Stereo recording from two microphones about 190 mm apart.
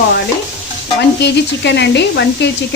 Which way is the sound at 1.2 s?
65° left (ahead or behind).